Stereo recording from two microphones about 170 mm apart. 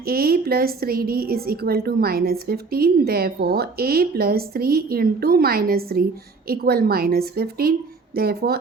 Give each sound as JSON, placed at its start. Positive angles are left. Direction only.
{"t": 0.0, "sound": "a woman's voice", "side_deg": -60}